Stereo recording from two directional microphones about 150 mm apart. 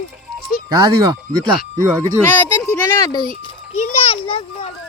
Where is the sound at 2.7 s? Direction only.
20° left (ahead or behind).